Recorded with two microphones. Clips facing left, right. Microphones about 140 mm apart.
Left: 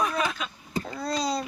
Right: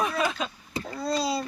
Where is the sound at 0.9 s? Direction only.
Centre (ahead or behind).